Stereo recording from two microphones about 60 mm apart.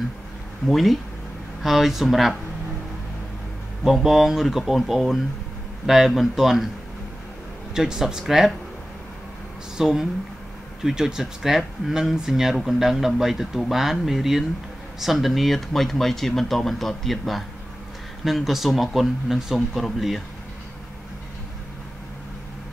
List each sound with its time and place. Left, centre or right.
0.7 s speech: centre
3.8 s speech: centre
7.7 s speech: centre
9.8 s speech: centre